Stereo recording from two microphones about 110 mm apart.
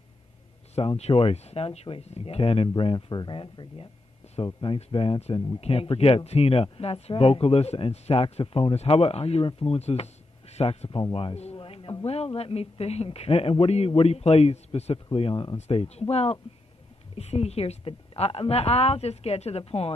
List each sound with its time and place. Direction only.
0.7 s speech: 70° left (ahead or behind)
2.8 s speech: 50° left (ahead or behind)
4.7 s a woman's voice: 65° left (ahead or behind)
11.5 s speech: 50° left (ahead or behind); by 15.0 s 70° left (ahead or behind)
15.1 s speech: 55° left (ahead or behind)
15.5 s a woman's voice: 70° left (ahead or behind)